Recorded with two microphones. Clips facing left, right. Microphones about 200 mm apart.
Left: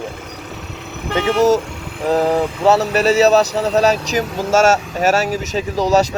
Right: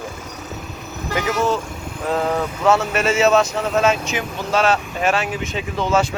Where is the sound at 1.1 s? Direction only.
30° left (ahead or behind).